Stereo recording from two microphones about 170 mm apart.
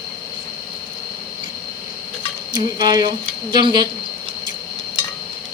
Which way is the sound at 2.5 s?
25° right (ahead or behind).